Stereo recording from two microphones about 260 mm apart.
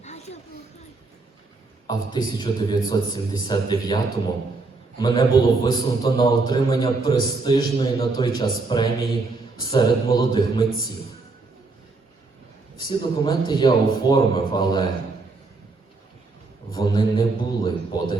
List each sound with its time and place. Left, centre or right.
0.0 s a sound: left
1.9 s a man's voice: centre
12.9 s a man's voice: centre
16.7 s a man's voice: centre